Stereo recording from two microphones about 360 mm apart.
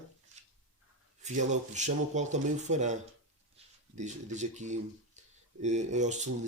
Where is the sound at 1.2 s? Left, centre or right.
Centre.